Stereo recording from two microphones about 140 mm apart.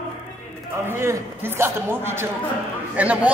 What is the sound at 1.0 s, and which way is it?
A woman's voice, 20° right (ahead or behind).